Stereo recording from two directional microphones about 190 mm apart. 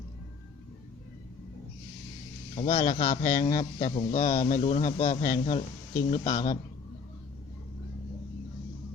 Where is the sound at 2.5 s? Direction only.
30° left (ahead or behind).